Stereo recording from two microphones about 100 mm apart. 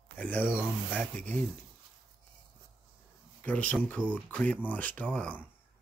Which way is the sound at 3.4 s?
15° left (ahead or behind).